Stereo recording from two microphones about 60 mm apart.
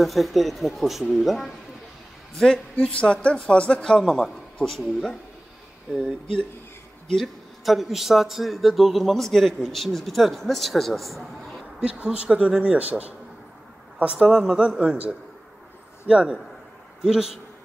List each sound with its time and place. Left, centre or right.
0.0 s a man's voice: centre
2.3 s a man's voice: centre
4.0 s a man's voice: centre
7.6 s a man's voice: centre
11.8 s speech: right
14.1 s a man's voice: centre
17.0 s a man's voice: centre